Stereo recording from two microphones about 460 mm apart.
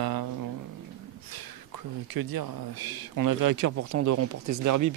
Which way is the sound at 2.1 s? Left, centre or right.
Right.